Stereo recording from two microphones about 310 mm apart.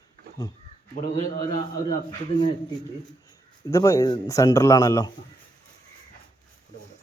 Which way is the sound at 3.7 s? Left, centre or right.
Centre.